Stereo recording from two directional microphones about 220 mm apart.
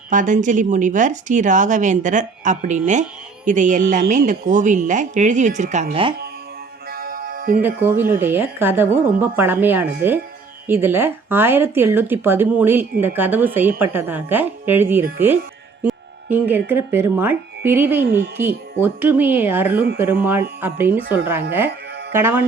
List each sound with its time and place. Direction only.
0.1 s speech: 35° right (ahead or behind)
6.9 s music: 40° right (ahead or behind)
7.6 s speech: 10° right (ahead or behind)
18.0 s speech: 50° right (ahead or behind)
18.3 s speech: 10° right (ahead or behind)